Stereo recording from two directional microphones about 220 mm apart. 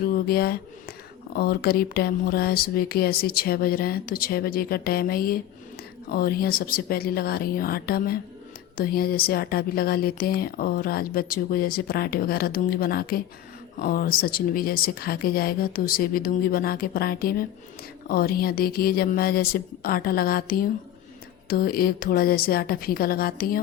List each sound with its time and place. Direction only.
0.0 s speech: 45° left (ahead or behind)